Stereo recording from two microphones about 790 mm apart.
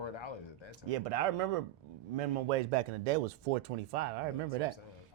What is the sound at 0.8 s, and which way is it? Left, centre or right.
Speech, right.